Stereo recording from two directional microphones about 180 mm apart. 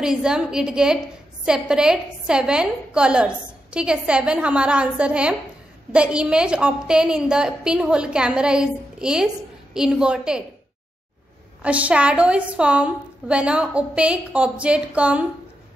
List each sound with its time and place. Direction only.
0.0 s a woman's voice: 5° right (ahead or behind)
11.6 s a woman's voice: 5° right (ahead or behind)